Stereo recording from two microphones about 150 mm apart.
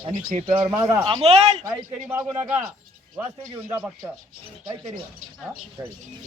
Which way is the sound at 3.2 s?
20° right (ahead or behind).